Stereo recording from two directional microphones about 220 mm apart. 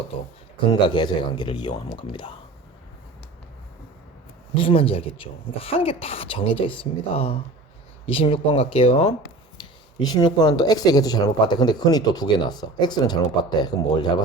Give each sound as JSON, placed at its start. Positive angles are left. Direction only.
{"t": 0.6, "sound": "speech", "side_deg": 20}
{"t": 4.5, "sound": "speech", "side_deg": 25}